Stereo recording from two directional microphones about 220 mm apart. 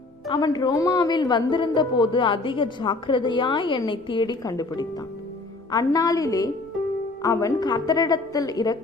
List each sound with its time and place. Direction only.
0.3 s a woman's voice: 20° left (ahead or behind)